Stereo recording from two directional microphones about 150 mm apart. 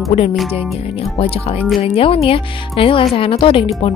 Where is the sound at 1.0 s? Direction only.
40° left (ahead or behind).